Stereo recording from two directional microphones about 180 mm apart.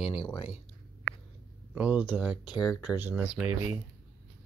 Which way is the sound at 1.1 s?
70° left (ahead or behind).